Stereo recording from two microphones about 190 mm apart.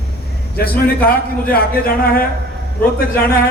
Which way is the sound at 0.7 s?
10° left (ahead or behind).